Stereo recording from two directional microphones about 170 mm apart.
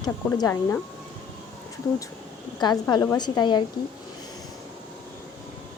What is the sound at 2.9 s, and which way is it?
Speech, 25° left (ahead or behind).